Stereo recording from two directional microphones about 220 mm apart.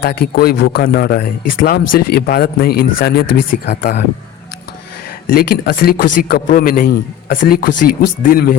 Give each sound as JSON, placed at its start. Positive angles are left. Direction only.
{"t": 0.0, "sound": "speech", "side_deg": 45}
{"t": 5.3, "sound": "a man's voice", "side_deg": 45}